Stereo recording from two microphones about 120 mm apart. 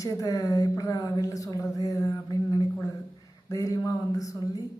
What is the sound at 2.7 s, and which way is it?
Speech, 25° left (ahead or behind).